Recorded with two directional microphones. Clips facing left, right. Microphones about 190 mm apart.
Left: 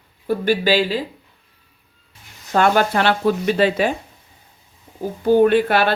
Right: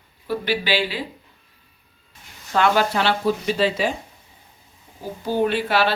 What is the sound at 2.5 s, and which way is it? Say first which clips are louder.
Speech: left 3 dB; 50° left (ahead or behind).